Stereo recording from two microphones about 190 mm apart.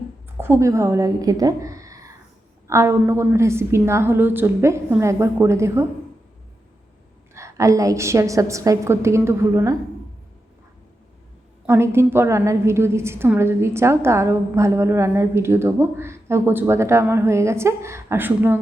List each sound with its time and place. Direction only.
0.3 s a woman's voice: 15° right (ahead or behind)
7.3 s a woman's voice: 15° right (ahead or behind)
11.6 s a woman's voice: 15° right (ahead or behind)